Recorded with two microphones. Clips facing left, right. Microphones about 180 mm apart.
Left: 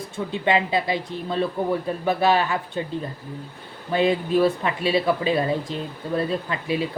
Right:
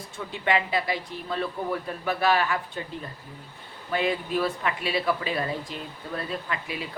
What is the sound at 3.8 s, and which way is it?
A woman's voice, 25° left (ahead or behind).